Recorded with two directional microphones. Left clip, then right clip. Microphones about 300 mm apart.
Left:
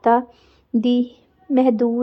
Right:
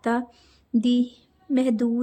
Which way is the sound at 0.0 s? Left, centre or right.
Centre.